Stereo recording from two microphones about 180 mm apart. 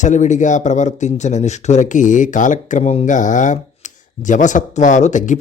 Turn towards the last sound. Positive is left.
turn(degrees=45)  # may be behind; listen again after turning